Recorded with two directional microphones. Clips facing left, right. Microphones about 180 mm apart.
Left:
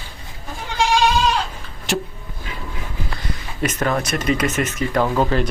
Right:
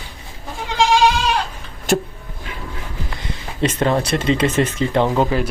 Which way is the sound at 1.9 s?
50° right (ahead or behind).